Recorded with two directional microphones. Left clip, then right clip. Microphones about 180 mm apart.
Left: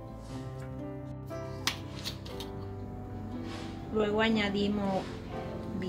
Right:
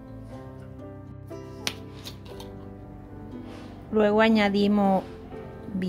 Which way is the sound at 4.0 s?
55° right (ahead or behind).